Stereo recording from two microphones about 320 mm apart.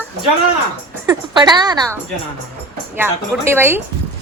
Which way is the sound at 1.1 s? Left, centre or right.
Centre.